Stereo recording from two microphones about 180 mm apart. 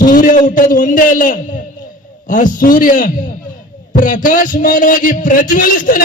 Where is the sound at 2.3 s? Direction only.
50° left (ahead or behind).